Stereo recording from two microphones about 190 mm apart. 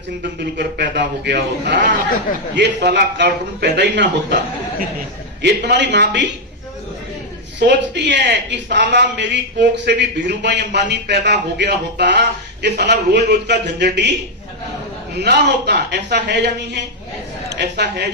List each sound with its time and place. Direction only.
0.2 s speech: 65° right (ahead or behind)
5.4 s speech: 65° right (ahead or behind)
7.6 s speech: 65° right (ahead or behind)
15.2 s speech: 60° right (ahead or behind)